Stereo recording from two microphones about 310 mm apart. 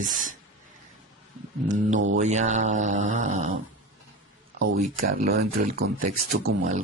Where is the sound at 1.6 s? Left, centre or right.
Right.